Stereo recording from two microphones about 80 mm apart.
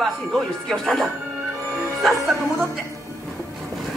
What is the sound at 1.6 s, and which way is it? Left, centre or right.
Music, right.